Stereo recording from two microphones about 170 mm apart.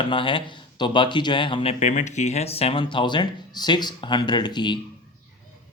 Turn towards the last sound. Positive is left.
turn(degrees=25)  # may be behind; listen again after turning